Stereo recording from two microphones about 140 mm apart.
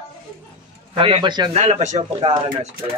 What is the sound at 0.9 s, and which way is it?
Speech, 35° right (ahead or behind).